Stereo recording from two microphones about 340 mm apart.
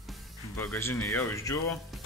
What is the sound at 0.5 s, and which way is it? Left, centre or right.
Speech, centre.